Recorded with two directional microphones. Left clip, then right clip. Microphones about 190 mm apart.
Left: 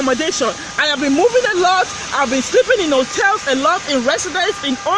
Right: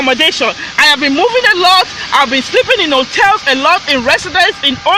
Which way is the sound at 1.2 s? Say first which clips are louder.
Right 3 dB; 20° right (ahead or behind).